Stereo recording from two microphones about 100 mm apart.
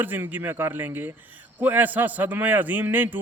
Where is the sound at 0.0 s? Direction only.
20° right (ahead or behind).